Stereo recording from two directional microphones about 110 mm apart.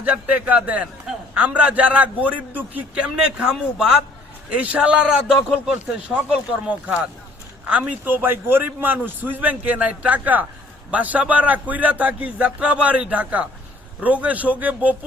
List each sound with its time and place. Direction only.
0.0 s a man's voice: 15° right (ahead or behind)